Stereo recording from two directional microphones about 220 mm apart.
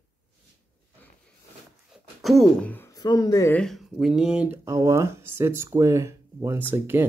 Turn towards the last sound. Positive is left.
turn(degrees=-10)  # may be behind; listen again after turning